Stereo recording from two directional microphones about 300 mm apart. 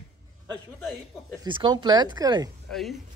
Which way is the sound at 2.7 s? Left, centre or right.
Centre.